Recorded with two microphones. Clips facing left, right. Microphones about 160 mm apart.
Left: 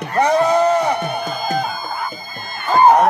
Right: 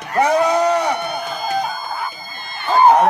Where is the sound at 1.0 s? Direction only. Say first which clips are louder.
Left 2 dB; 40° left (ahead or behind).